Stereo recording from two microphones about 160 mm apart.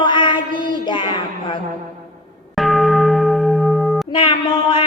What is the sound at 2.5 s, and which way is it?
Church bell, centre (ahead or behind).